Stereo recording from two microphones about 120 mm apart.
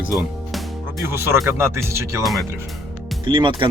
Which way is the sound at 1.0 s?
20° right (ahead or behind).